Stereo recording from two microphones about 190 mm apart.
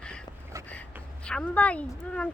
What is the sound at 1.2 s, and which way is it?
Speech, 5° left (ahead or behind).